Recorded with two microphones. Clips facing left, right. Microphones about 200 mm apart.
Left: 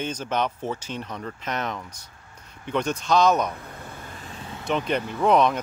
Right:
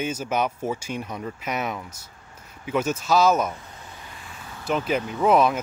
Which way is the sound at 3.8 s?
50° left (ahead or behind).